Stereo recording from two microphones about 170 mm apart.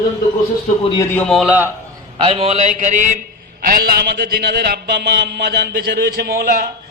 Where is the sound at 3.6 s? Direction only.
60° right (ahead or behind).